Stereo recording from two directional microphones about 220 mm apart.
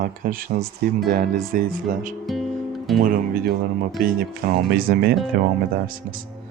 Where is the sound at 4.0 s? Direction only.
40° right (ahead or behind).